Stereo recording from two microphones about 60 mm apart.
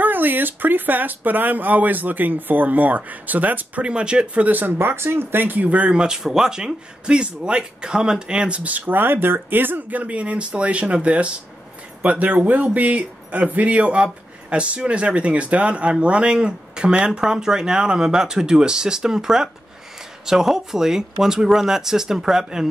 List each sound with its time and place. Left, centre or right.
0.0 s speech: right; by 22.7 s centre